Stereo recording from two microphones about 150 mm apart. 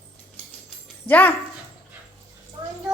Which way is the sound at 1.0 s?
10° left (ahead or behind).